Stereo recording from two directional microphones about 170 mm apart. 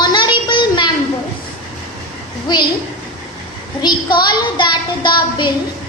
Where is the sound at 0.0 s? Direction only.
25° left (ahead or behind).